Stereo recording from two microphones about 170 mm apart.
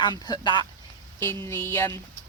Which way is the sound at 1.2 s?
15° left (ahead or behind).